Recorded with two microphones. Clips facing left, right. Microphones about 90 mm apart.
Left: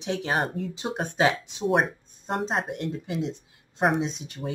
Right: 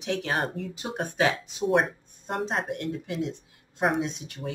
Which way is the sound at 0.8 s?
25° left (ahead or behind).